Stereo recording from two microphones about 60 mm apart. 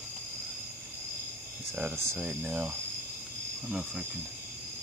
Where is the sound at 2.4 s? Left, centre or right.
Right.